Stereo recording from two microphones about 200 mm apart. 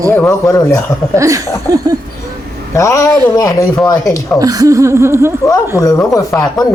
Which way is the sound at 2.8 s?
15° left (ahead or behind).